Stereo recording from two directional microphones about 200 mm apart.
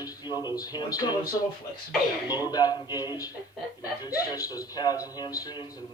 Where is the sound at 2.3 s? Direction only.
20° left (ahead or behind).